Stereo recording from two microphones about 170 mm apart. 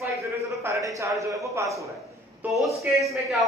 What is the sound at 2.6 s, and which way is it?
Speech, centre (ahead or behind).